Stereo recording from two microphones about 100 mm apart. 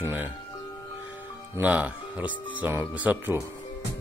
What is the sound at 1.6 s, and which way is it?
Speech, 15° right (ahead or behind).